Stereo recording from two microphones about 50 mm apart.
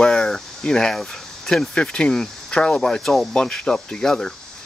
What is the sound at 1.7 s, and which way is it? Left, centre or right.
Speech, left.